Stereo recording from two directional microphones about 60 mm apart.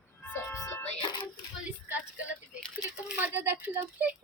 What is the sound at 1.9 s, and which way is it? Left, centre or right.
Speech, right.